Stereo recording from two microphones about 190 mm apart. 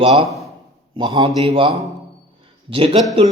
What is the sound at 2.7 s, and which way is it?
Speech, 30° right (ahead or behind).